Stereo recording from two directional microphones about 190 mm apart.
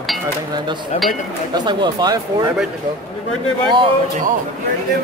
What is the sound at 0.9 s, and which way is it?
Speech, 35° left (ahead or behind).